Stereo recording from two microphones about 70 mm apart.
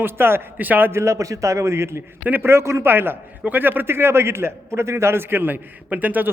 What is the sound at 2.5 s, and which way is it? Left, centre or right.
A man's voice, right.